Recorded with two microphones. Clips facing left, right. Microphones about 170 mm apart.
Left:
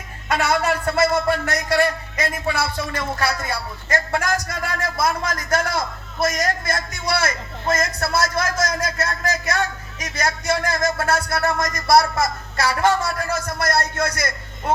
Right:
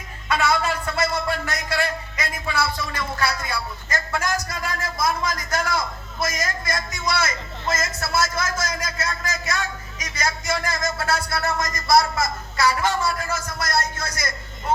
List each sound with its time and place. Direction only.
0.3 s a man's voice: 60° left (ahead or behind)
1.3 s a man's voice: 45° left (ahead or behind)
7.9 s speech: 35° left (ahead or behind)
8.2 s a man's voice: 60° left (ahead or behind)